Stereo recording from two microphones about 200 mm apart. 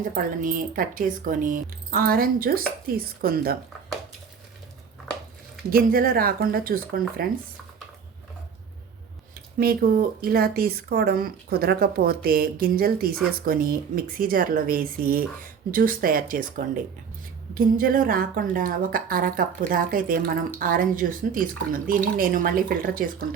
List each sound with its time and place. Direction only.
0.0 s speech: 40° right (ahead or behind)
5.7 s speech: 45° right (ahead or behind)
9.6 s speech: 50° right (ahead or behind)